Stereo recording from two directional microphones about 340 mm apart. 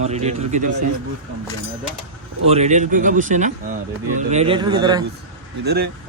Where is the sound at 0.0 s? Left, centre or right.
Centre.